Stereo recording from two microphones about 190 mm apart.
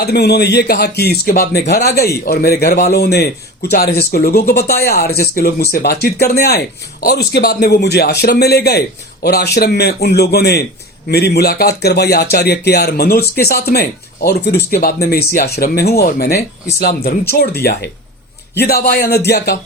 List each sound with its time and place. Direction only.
0.0 s speech: 60° left (ahead or behind)